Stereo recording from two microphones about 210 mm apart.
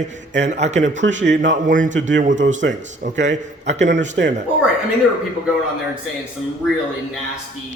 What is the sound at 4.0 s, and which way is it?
Speech, 55° right (ahead or behind).